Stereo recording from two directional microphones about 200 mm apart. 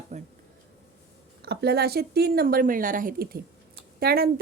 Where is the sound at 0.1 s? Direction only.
35° right (ahead or behind).